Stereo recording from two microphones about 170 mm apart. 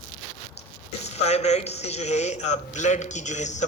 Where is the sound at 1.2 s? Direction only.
40° left (ahead or behind).